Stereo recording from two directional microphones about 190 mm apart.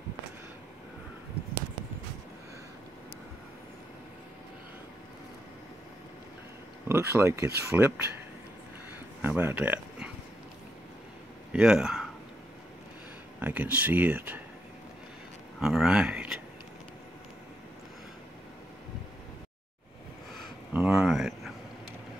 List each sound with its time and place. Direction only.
6.9 s speech: 10° right (ahead or behind)
9.2 s speech: 10° right (ahead or behind)
11.5 s speech: 5° right (ahead or behind)
13.4 s speech: 10° right (ahead or behind)
15.6 s speech: centre (ahead or behind)
20.7 s speech: 5° right (ahead or behind)